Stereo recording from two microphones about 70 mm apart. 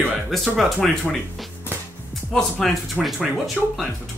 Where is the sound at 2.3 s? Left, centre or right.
Centre.